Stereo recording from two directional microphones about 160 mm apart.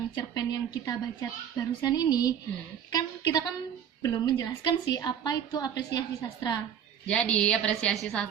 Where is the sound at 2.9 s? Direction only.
25° left (ahead or behind).